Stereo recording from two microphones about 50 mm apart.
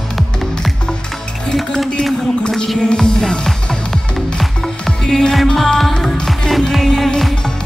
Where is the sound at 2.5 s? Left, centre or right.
Centre.